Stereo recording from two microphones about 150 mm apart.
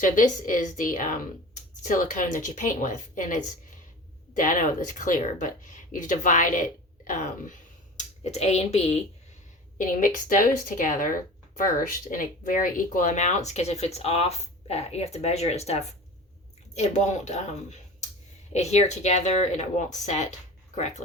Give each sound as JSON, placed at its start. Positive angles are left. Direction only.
{"t": 0.0, "sound": "speech", "side_deg": 60}
{"t": 4.4, "sound": "speech", "side_deg": 60}
{"t": 9.7, "sound": "speech", "side_deg": 65}